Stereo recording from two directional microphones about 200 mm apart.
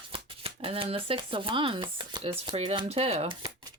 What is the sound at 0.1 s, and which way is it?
Speech, 30° right (ahead or behind).